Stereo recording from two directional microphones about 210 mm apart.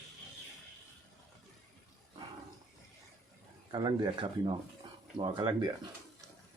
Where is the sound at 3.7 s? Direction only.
20° right (ahead or behind).